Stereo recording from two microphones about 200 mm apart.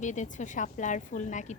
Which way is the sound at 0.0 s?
35° left (ahead or behind).